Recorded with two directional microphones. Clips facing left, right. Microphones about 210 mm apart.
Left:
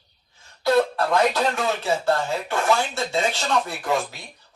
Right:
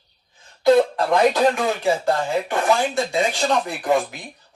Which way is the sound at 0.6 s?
15° right (ahead or behind).